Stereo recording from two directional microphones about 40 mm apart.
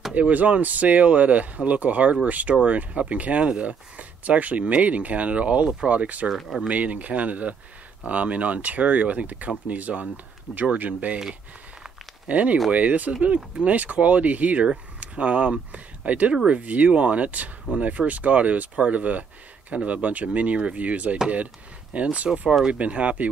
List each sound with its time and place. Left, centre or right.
0.1 s speech: right
6.3 s speech: centre
6.7 s speech: right
12.3 s speech: right